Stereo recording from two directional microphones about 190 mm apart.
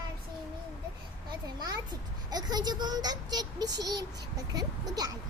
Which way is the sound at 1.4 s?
20° right (ahead or behind).